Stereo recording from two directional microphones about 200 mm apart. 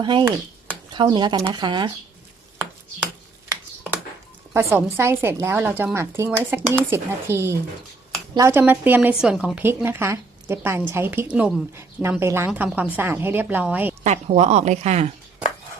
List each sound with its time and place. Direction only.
0.0 s speech: 25° right (ahead or behind)
4.5 s speech: 15° right (ahead or behind)
14.0 s speech: 35° right (ahead or behind)